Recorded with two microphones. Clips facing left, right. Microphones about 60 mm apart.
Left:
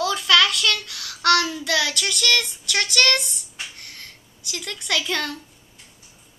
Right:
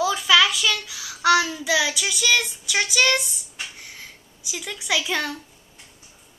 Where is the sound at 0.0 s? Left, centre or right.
Centre.